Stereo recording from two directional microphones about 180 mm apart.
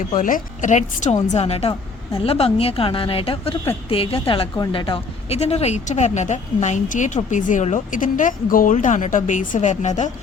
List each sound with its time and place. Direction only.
0.0 s a woman's voice: 45° left (ahead or behind)